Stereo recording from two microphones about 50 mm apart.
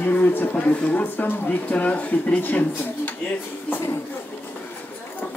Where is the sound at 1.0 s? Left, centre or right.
Left.